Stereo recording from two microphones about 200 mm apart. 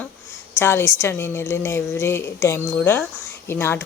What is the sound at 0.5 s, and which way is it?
A woman's voice, 10° left (ahead or behind).